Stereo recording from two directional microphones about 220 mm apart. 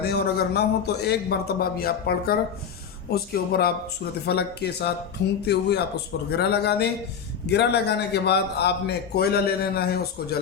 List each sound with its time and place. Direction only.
0.0 s a man's voice: 45° left (ahead or behind)